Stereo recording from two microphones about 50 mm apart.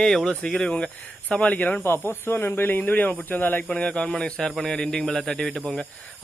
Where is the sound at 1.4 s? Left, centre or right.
Left.